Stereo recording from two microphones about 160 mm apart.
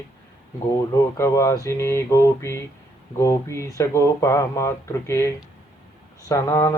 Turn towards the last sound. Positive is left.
turn(degrees=20)  # may be behind; listen again after turning